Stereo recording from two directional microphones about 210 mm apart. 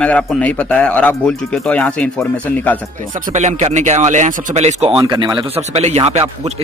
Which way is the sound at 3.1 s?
35° right (ahead or behind).